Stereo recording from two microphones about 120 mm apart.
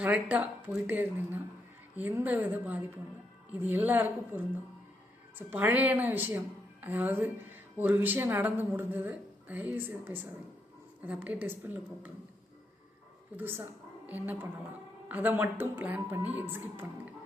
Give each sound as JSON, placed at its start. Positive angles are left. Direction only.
{"t": 0.0, "sound": "speech", "side_deg": -15}
{"t": 13.3, "sound": "speech", "side_deg": -15}